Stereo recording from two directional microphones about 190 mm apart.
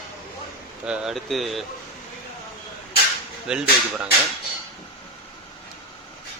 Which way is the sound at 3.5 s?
5° right (ahead or behind).